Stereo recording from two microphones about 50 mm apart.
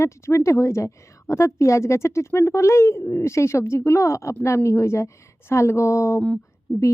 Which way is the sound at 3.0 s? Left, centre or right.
Left.